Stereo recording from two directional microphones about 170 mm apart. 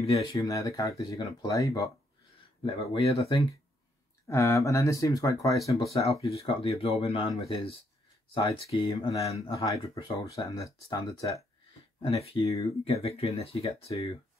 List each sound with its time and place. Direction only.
0.1 s speech: 20° left (ahead or behind)
2.6 s speech: 35° left (ahead or behind)
4.3 s speech: 15° left (ahead or behind)
6.2 s speech: 35° left (ahead or behind)
8.4 s speech: 20° left (ahead or behind)
8.7 s speech: 30° left (ahead or behind)
10.4 s speech: 20° left (ahead or behind)
12.0 s speech: 35° left (ahead or behind)